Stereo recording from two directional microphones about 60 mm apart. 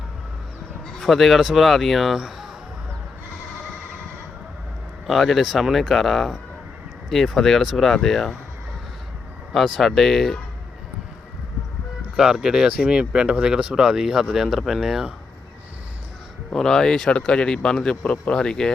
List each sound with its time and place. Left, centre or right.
0.9 s speech: centre
5.0 s speech: centre
9.5 s speech: centre
12.1 s speech: centre
16.6 s speech: centre